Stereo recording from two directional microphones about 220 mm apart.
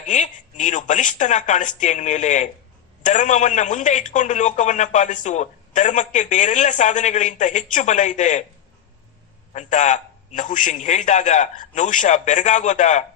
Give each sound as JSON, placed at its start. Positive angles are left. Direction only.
{"t": 0.0, "sound": "a man's voice", "side_deg": 35}
{"t": 9.5, "sound": "a man's voice", "side_deg": 35}